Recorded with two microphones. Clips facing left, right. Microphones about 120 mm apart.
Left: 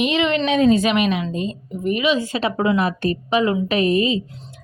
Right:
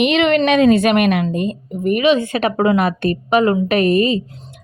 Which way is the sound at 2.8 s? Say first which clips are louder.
Right 3 dB; 65° right (ahead or behind).